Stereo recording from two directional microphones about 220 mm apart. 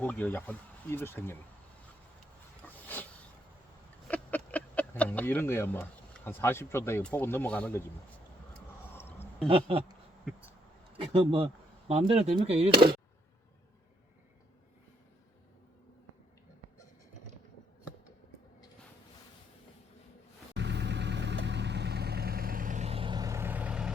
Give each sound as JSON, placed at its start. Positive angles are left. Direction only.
{"t": 0.0, "sound": "speech", "side_deg": 5}
{"t": 2.6, "sound": "a sound", "side_deg": 10}
{"t": 4.1, "sound": "speech", "side_deg": 5}
{"t": 8.5, "sound": "a sound", "side_deg": 10}
{"t": 9.5, "sound": "speech", "side_deg": -25}
{"t": 20.5, "sound": "vehicle", "side_deg": -50}